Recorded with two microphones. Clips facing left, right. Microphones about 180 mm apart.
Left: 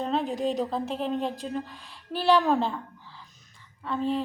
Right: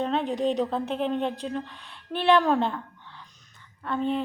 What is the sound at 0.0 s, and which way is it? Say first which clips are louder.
A woman's voice: right 2 dB; centre (ahead or behind).